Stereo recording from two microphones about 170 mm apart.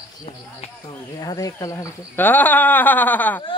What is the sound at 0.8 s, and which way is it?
Speech, 25° left (ahead or behind).